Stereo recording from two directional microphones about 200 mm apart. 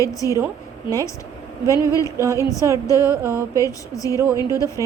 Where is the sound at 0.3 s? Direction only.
15° right (ahead or behind).